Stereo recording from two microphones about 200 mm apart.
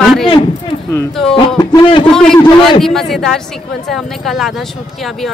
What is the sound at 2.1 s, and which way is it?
Speech, 5° left (ahead or behind).